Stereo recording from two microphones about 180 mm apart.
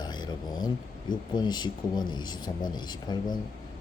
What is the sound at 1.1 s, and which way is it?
Speech, 25° left (ahead or behind).